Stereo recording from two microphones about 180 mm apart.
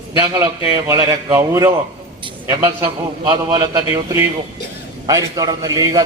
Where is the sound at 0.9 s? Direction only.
15° right (ahead or behind).